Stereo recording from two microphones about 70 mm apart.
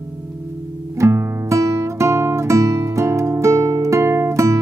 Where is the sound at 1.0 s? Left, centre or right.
Right.